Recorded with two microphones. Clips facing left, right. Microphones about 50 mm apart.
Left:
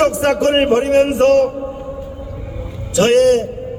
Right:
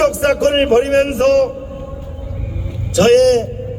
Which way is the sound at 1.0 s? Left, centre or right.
Left.